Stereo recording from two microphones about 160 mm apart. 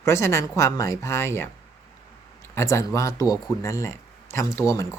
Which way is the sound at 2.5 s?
20° left (ahead or behind).